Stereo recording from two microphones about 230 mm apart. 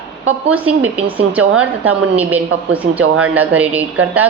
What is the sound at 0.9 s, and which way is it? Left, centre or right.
Speech, right.